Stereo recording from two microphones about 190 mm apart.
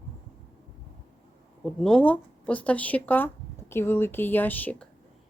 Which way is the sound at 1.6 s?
5° left (ahead or behind).